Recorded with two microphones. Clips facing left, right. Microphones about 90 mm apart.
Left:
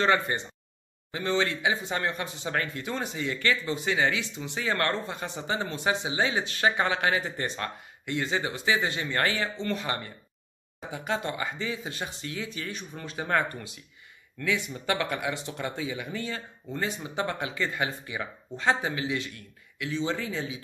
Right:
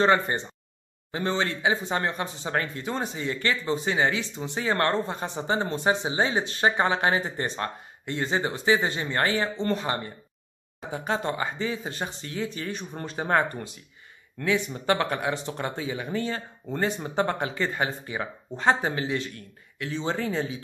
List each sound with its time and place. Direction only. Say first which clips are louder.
0.0 s speech: right 3 dB; 30° right (ahead or behind)